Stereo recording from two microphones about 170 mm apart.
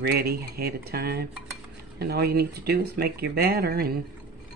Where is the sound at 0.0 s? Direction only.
65° right (ahead or behind).